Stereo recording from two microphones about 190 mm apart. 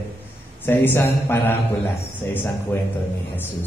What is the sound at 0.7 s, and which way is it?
A man's voice, 10° left (ahead or behind).